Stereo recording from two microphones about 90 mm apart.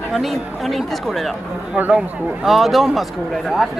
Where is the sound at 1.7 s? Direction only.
15° right (ahead or behind).